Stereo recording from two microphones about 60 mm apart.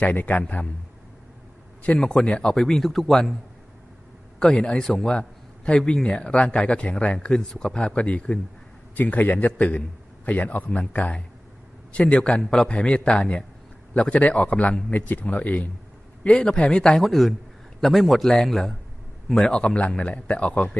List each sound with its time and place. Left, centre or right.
0.0 s a man's voice: left
2.0 s speech: centre
4.4 s speech: centre
9.0 s a man's voice: left
16.2 s speech: centre
17.0 s a man's voice: centre; by 20.7 s left